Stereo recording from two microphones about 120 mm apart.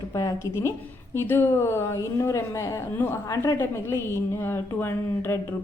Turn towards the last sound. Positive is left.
turn(degrees=20)  # may be behind; listen again after turning